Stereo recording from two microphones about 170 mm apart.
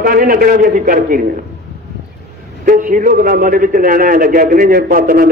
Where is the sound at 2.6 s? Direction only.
55° right (ahead or behind).